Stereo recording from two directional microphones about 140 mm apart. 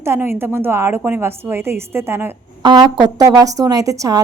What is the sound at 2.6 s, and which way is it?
Speech, 30° right (ahead or behind).